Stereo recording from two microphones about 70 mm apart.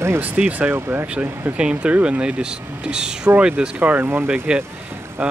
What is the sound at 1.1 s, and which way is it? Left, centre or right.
Speech, centre.